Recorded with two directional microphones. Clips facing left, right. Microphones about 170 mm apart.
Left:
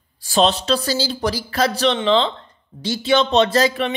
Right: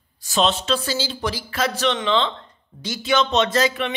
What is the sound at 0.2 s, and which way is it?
A woman's voice, 35° left (ahead or behind).